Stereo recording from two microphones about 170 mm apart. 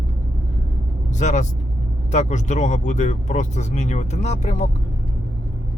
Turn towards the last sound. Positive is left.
turn(degrees=45)  # may be behind; listen again after turning